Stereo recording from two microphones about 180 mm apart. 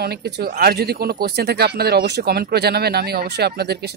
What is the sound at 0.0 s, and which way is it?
Speech, 60° right (ahead or behind).